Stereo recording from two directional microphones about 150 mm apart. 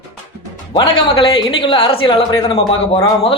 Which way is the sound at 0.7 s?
35° left (ahead or behind).